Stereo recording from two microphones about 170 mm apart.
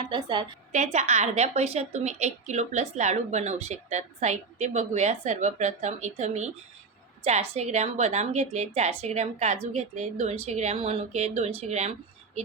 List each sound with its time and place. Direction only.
0.1 s a woman's voice: 25° right (ahead or behind)
0.7 s a woman's voice: 40° right (ahead or behind)